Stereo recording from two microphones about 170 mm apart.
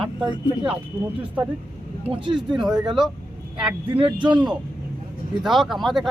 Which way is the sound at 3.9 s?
30° right (ahead or behind).